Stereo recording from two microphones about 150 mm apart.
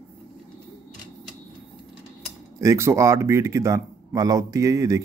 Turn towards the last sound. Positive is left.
turn(degrees=-20)  # may be behind; listen again after turning